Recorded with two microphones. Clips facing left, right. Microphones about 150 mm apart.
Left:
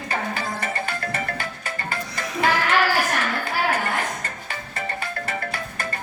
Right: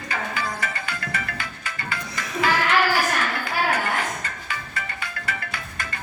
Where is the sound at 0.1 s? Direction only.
40° left (ahead or behind).